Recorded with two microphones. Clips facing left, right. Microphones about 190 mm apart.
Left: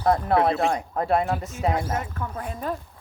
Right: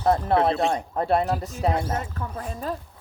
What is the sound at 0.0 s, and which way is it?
Speech, 25° right (ahead or behind).